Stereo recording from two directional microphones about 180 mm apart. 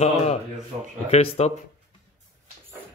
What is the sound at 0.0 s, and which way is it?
Speech, 35° left (ahead or behind).